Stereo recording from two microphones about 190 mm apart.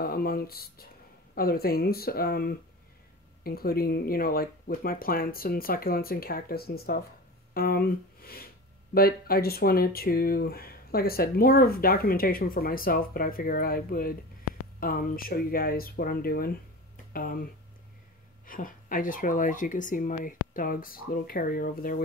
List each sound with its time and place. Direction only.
0.0 s speech: 50° left (ahead or behind)